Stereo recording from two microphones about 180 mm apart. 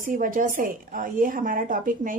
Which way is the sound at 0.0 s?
50° right (ahead or behind).